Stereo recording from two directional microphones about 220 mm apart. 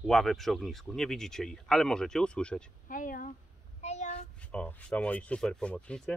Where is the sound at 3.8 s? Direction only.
30° left (ahead or behind).